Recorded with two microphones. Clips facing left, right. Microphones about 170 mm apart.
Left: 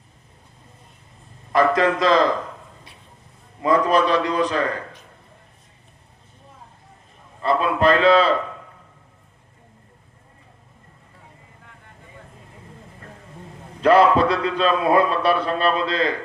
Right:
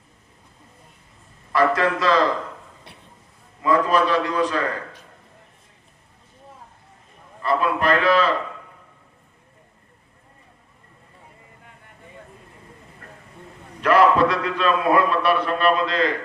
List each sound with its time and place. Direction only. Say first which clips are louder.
1.5 s a man's voice: left 2 dB; 20° left (ahead or behind)
3.6 s a man's voice: left 1 dB; 20° left (ahead or behind)
7.4 s a man's voice: left 3 dB; 25° left (ahead or behind)
13.8 s a man's voice: left 2 dB; 30° left (ahead or behind)